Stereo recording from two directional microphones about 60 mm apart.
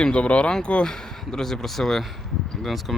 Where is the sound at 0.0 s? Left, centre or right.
Centre.